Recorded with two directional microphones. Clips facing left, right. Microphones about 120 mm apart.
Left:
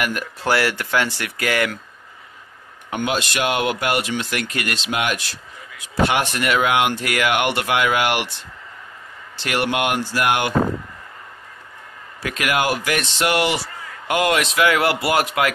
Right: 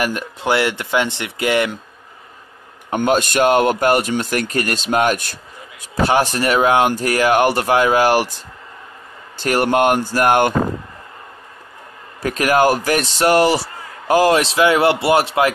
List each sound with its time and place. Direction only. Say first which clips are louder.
0.0 s speech: right 3 dB; 25° right (ahead or behind)
2.9 s speech: right 6 dB; 45° right (ahead or behind)
6.0 s speech: right 5 dB; 35° right (ahead or behind)
12.2 s speech: right 7 dB; 35° right (ahead or behind)